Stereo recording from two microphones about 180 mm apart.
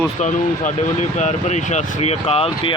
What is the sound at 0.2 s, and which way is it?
Speech, 40° left (ahead or behind).